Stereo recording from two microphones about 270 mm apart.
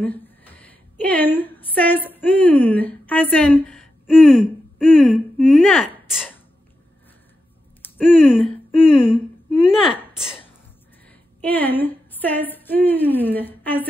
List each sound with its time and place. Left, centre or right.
0.0 s a woman's voice: centre
7.8 s speech: centre
11.4 s a woman's voice: centre